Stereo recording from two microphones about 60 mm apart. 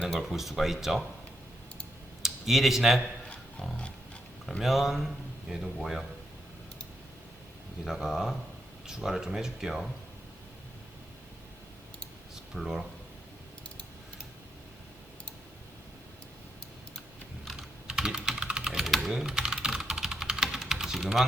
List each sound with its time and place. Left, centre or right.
0.1 s a man's voice: centre
2.2 s speech: centre
3.6 s pig: centre
4.6 s a man's voice: centre
7.9 s speech: centre
12.5 s a man's voice: centre
17.6 s computer keyboard: centre
19.1 s typing: centre